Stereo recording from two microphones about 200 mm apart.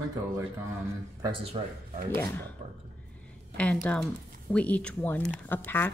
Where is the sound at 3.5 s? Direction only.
5° left (ahead or behind).